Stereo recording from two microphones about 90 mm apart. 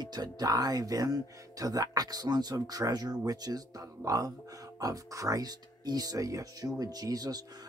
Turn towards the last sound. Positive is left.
turn(degrees=-45)  # may be behind; listen again after turning